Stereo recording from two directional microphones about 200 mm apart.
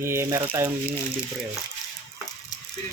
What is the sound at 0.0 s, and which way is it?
Speech, 15° right (ahead or behind).